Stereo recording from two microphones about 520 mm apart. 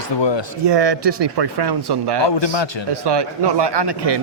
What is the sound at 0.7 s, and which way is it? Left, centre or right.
Speech, right.